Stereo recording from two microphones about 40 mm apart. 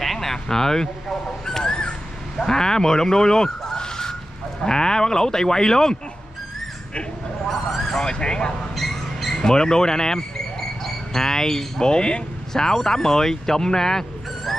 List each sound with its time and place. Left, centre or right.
0.0 s speech: centre
1.4 s a sound: centre
4.6 s speech: centre
7.4 s speech: centre
8.0 s speech: left
8.7 s a sound: centre
9.4 s speech: centre